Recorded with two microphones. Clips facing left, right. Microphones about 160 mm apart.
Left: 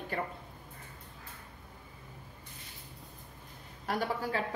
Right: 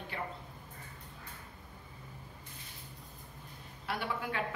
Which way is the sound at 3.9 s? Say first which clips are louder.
Left 4 dB; 40° left (ahead or behind).